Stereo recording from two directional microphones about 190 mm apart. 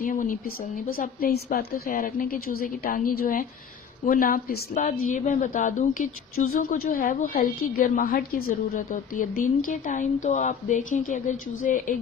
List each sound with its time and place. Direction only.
0.0 s a woman's voice: 45° left (ahead or behind)